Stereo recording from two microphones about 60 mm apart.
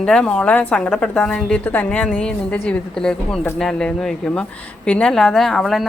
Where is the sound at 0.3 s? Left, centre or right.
Left.